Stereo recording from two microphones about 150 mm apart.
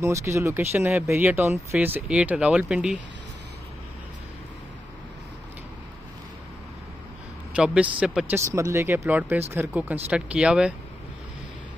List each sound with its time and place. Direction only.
0.0 s speech: 20° right (ahead or behind)
7.5 s speech: 5° right (ahead or behind)
8.5 s speech: 20° right (ahead or behind)